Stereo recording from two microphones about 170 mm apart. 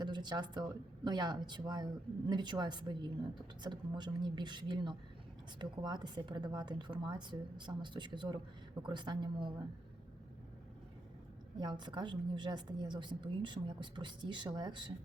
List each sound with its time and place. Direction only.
0.0 s a woman's voice: 25° right (ahead or behind)
11.6 s a woman's voice: 25° right (ahead or behind)